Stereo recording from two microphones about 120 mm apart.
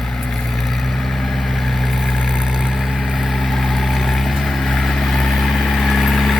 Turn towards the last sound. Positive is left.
turn(degrees=0)  # may be behind; listen again after turning